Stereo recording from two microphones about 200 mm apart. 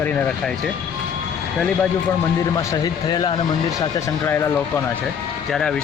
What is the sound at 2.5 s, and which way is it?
Speech, 20° left (ahead or behind).